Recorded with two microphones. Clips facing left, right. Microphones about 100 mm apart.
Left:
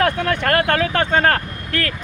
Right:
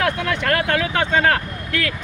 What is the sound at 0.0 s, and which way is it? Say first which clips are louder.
Speech: left 3 dB; 45° left (ahead or behind).